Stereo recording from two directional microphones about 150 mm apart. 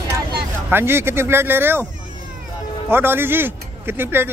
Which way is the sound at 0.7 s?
15° right (ahead or behind).